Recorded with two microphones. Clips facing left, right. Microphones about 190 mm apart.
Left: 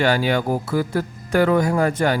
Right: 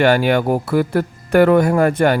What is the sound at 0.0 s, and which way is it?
Speech, 60° right (ahead or behind).